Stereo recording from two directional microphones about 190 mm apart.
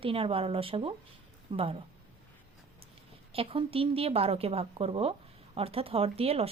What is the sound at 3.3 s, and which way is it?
Speech, 30° right (ahead or behind).